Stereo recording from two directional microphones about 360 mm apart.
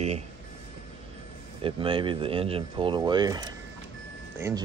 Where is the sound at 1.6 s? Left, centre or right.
Centre.